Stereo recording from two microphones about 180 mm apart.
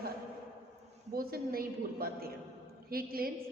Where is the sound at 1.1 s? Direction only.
55° right (ahead or behind).